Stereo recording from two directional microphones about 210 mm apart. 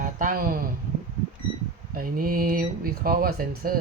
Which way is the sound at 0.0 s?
40° right (ahead or behind).